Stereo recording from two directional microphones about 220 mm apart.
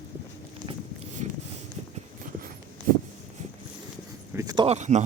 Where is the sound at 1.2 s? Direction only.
30° right (ahead or behind).